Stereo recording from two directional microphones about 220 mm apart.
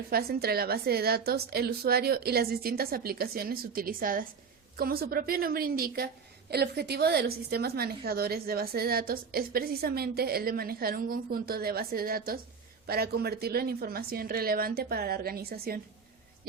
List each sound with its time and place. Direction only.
0.1 s a woman's voice: 45° right (ahead or behind)